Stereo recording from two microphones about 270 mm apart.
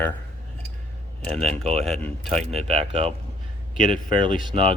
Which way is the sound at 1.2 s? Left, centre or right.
Centre.